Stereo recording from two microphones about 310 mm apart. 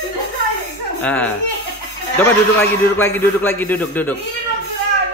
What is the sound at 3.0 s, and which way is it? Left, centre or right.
A man's voice, centre.